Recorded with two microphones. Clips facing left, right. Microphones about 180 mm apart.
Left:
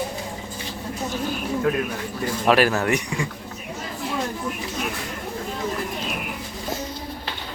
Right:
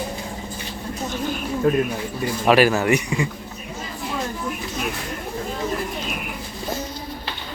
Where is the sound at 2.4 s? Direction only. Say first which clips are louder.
Right 3 dB; 5° right (ahead or behind).